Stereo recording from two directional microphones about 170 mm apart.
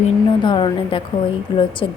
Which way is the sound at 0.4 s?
30° left (ahead or behind).